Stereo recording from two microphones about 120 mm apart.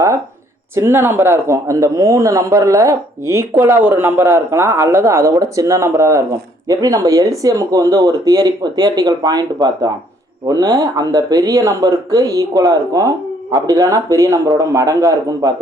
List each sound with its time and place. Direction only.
0.8 s speech: 20° right (ahead or behind)
3.5 s speech: 15° right (ahead or behind)